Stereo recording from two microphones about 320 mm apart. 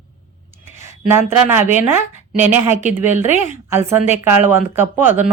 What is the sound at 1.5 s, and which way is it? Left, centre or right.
A woman's voice, centre.